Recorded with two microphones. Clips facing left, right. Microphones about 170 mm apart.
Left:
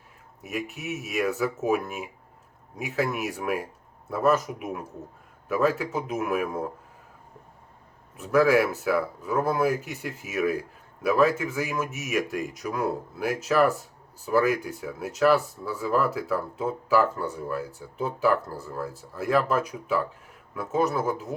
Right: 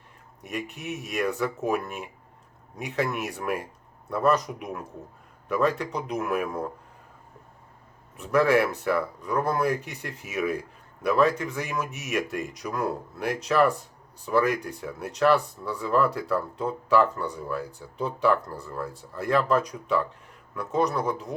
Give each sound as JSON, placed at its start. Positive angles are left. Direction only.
{"t": 0.4, "sound": "speech", "side_deg": 5}
{"t": 8.1, "sound": "speech", "side_deg": 0}